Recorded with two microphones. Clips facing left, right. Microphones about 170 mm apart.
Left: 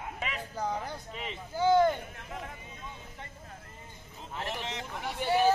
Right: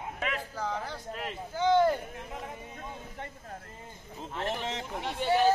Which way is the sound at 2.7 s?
55° right (ahead or behind).